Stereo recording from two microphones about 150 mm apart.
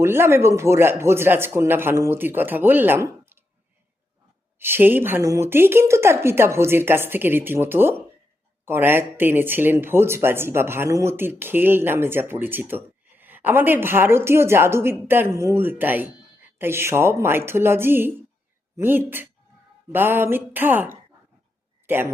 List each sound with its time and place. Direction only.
0.0 s speech: 15° right (ahead or behind)
4.6 s speech: 15° right (ahead or behind)